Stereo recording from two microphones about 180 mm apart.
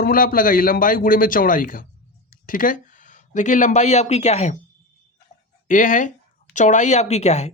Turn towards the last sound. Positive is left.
turn(degrees=40)  # may be behind; listen again after turning